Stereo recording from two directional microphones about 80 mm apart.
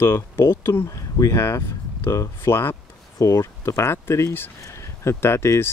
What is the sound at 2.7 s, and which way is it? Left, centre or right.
Speech, left.